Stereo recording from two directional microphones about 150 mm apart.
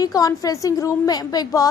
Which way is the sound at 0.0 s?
25° left (ahead or behind).